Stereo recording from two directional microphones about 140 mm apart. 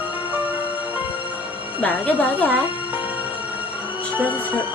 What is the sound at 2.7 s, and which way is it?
Music, 35° left (ahead or behind).